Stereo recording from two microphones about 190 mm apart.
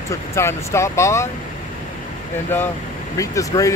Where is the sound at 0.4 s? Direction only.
15° left (ahead or behind).